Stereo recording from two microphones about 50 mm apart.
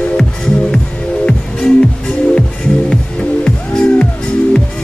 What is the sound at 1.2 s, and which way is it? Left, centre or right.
Music, centre.